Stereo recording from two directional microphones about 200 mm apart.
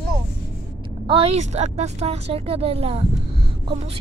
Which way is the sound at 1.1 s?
30° right (ahead or behind).